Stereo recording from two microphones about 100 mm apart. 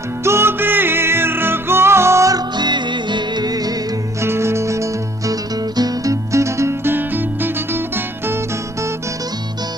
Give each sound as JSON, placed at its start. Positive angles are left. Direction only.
{"t": 0.3, "sound": "music", "side_deg": -25}
{"t": 2.6, "sound": "music", "side_deg": -50}
{"t": 4.2, "sound": "music", "side_deg": -25}